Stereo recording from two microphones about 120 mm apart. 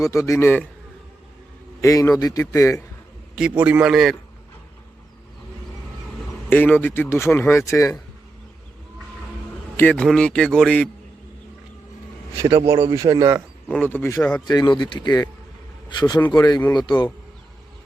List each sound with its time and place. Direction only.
0.0 s speech: 25° left (ahead or behind)
1.8 s speech: 30° left (ahead or behind)
3.3 s a man's voice: 10° right (ahead or behind)
3.9 s a man's voice: centre (ahead or behind)
6.5 s speech: 15° left (ahead or behind)
9.7 s a man's voice: 10° left (ahead or behind)
12.6 s speech: 25° right (ahead or behind)
13.8 s a man's voice: 15° left (ahead or behind)
14.4 s speech: 35° left (ahead or behind)